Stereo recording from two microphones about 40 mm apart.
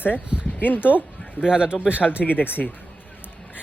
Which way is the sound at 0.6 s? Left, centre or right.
Left.